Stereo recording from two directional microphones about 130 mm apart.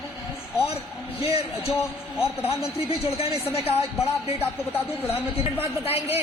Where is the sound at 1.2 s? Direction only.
50° left (ahead or behind).